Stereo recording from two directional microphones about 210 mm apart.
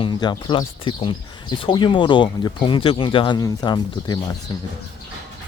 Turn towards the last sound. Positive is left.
turn(degrees=15)  # may be behind; listen again after turning